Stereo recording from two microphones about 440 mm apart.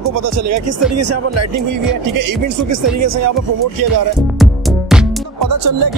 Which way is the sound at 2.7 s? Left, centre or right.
Right.